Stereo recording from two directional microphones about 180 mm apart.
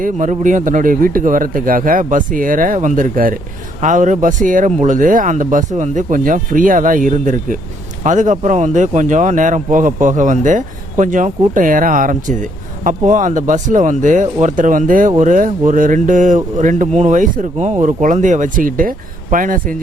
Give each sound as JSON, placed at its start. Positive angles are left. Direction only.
{"t": 0.0, "sound": "a man's voice", "side_deg": -45}